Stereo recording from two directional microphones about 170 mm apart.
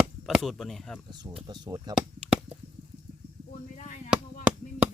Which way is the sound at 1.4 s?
25° right (ahead or behind).